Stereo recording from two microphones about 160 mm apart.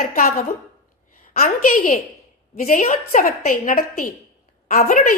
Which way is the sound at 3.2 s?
60° left (ahead or behind).